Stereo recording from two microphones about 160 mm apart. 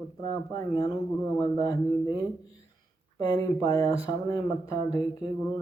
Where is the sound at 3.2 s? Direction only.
25° left (ahead or behind).